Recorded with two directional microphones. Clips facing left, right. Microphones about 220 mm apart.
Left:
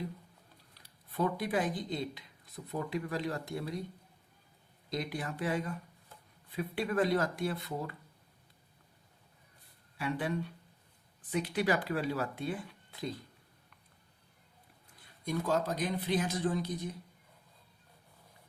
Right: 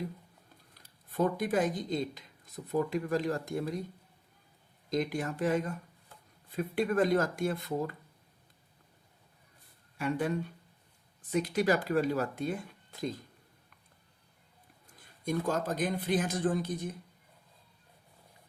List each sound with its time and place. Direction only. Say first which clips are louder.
0.7 s speech: right 1 dB; 45° right (ahead or behind)
4.9 s a man's voice: right 5 dB; 45° right (ahead or behind)
10.0 s a man's voice: right 3 dB; 45° right (ahead or behind)
14.9 s a man's voice: right 3 dB; 45° right (ahead or behind)